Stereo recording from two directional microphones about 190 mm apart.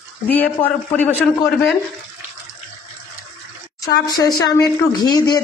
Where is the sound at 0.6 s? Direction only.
30° left (ahead or behind).